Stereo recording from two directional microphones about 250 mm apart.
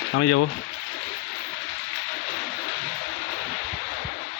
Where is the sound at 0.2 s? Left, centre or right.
Left.